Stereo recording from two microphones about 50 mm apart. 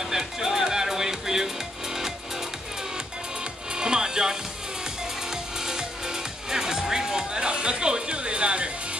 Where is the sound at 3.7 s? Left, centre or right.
Centre.